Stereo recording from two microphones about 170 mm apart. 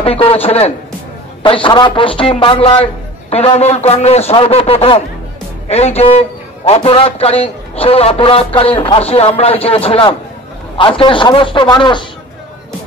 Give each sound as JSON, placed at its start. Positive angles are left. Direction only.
{"t": 0.0, "sound": "a man's voice", "side_deg": 35}